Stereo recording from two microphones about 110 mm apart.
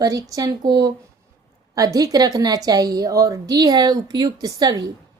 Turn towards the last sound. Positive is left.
turn(degrees=-35)  # may be behind; listen again after turning